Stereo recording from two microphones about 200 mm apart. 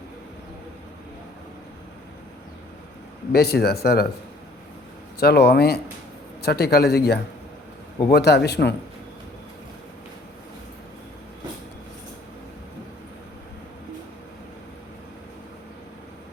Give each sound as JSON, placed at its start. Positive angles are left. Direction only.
{"t": 3.3, "sound": "speech", "side_deg": 50}
{"t": 5.2, "sound": "speech", "side_deg": 55}